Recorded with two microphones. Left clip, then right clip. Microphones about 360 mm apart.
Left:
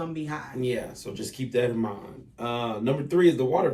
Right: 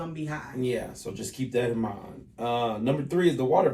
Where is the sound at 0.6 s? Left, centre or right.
Centre.